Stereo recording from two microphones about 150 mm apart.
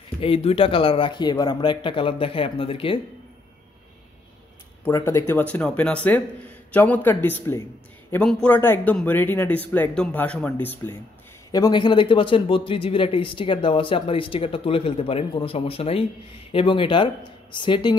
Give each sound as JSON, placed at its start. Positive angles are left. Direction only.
{"t": 0.2, "sound": "speech", "side_deg": 40}
{"t": 4.8, "sound": "speech", "side_deg": 15}
{"t": 11.5, "sound": "speech", "side_deg": 30}